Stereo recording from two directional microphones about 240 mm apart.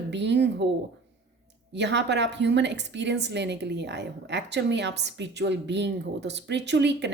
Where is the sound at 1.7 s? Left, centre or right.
Right.